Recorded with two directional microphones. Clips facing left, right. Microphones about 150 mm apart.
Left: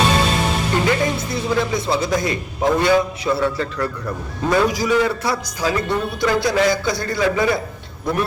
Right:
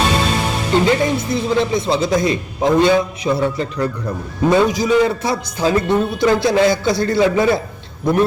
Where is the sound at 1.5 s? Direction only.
20° right (ahead or behind).